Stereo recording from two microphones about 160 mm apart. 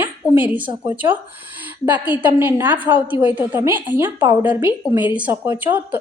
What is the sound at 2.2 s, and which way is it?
A woman's voice, 15° right (ahead or behind).